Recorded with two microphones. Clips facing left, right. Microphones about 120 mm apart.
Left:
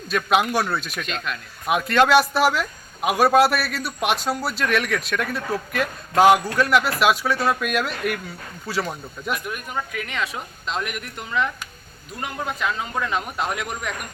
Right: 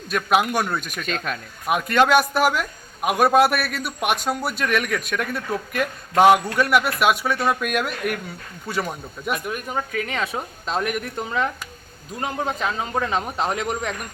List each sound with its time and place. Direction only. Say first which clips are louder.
0.1 s a man's voice: even; 5° right (ahead or behind)
1.0 s speech: right 2 dB; 45° right (ahead or behind)
1.6 s a man's voice: even; centre (ahead or behind)
9.3 s a woman's voice: right 2 dB; 35° right (ahead or behind)